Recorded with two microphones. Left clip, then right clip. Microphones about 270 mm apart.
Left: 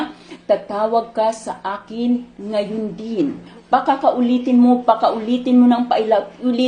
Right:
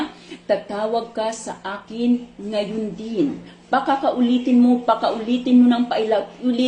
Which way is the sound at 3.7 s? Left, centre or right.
Centre.